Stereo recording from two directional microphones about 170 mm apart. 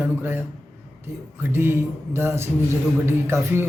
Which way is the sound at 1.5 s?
15° right (ahead or behind).